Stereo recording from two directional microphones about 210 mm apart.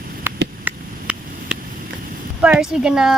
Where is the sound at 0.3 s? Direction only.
10° right (ahead or behind).